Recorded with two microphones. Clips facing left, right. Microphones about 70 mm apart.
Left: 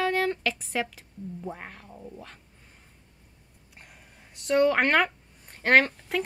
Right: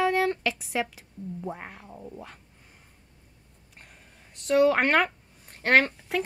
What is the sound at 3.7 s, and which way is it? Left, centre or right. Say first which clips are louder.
Speech: left 1 dB; centre.